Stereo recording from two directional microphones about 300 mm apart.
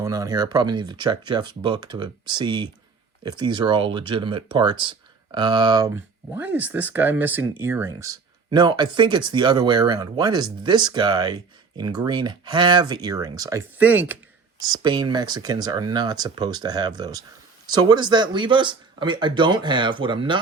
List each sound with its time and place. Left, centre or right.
0.0 s speech: centre